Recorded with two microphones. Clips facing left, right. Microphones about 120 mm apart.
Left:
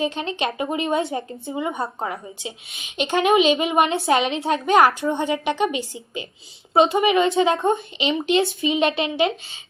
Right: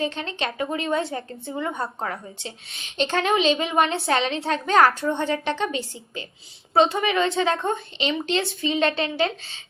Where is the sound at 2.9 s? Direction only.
15° left (ahead or behind).